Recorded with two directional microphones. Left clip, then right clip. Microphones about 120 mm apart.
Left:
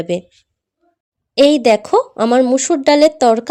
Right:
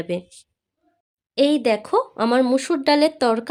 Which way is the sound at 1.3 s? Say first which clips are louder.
Left 8 dB; 40° left (ahead or behind).